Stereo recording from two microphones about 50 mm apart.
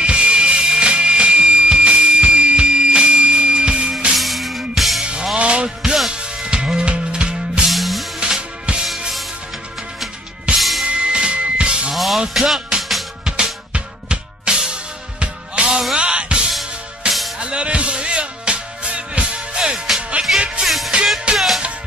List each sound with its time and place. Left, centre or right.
0.0 s music: right
4.1 s music: centre
5.4 s music: right
7.6 s music: centre
8.2 s music: centre
10.5 s music: centre
10.9 s music: centre
11.9 s music: centre
20.6 s music: centre
21.3 s music: right